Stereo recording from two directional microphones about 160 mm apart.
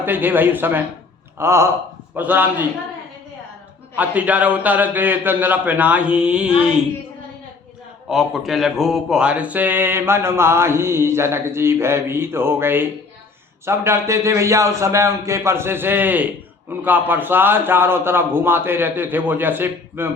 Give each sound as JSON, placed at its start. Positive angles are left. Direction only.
{"t": 0.0, "sound": "speech", "side_deg": -10}
{"t": 3.9, "sound": "speech", "side_deg": -10}
{"t": 8.1, "sound": "speech", "side_deg": 0}